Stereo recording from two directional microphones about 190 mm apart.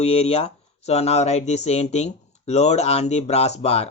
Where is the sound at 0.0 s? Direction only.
35° left (ahead or behind).